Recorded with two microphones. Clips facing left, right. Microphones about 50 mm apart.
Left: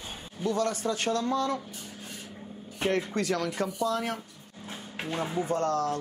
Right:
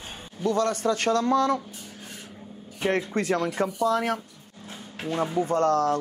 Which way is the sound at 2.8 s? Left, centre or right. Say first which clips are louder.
Right 3 dB; right.